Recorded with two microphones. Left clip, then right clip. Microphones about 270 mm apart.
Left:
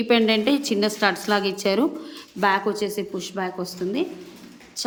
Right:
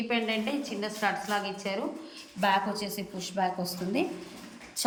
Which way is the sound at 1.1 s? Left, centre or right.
Left.